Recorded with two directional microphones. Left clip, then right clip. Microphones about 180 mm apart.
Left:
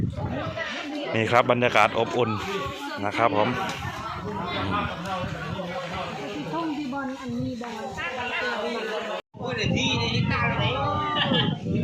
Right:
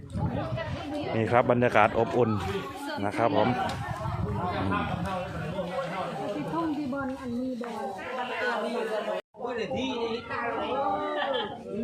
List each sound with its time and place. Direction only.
1.1 s speech: 10° right (ahead or behind)
3.0 s speech: 15° right (ahead or behind)